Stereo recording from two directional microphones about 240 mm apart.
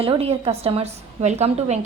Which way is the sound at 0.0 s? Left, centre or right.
Right.